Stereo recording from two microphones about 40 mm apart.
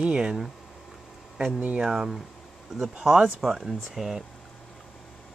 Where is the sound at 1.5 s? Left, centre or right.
Right.